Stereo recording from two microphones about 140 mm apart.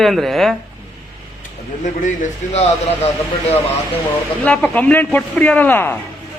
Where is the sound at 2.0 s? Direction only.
60° left (ahead or behind).